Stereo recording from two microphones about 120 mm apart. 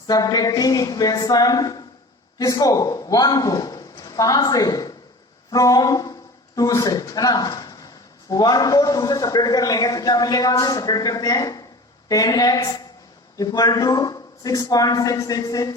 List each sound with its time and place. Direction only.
0.1 s a man's voice: 35° left (ahead or behind)
5.5 s a sound: 30° left (ahead or behind)
6.6 s a man's voice: 30° left (ahead or behind)